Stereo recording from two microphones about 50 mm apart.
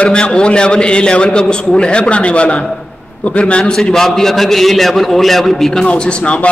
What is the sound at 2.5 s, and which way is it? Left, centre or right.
Speech, centre.